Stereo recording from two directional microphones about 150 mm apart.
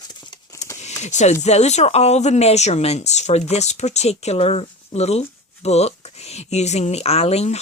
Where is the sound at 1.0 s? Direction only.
50° left (ahead or behind).